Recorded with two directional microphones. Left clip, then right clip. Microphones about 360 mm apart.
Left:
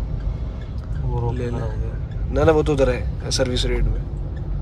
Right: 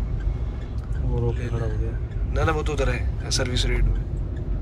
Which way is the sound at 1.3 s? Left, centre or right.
Centre.